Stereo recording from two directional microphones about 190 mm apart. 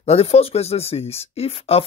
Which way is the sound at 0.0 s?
35° left (ahead or behind).